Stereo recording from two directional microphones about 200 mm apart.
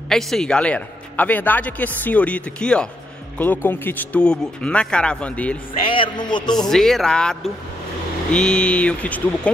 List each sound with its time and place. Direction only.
0.1 s a man's voice: centre (ahead or behind)
5.8 s a man's voice: 25° left (ahead or behind)
6.7 s speech: centre (ahead or behind)